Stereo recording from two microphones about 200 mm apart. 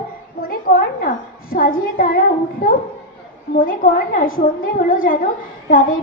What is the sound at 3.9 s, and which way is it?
A child's voice, 45° left (ahead or behind).